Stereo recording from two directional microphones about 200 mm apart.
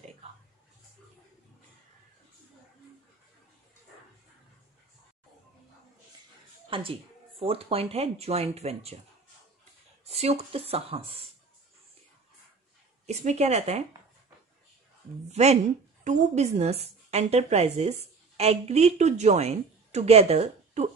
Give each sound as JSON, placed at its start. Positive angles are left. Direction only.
{"t": 6.7, "sound": "speech", "side_deg": -25}
{"t": 10.0, "sound": "speech", "side_deg": -30}
{"t": 13.0, "sound": "a woman's voice", "side_deg": -35}
{"t": 15.3, "sound": "a woman's voice", "side_deg": -35}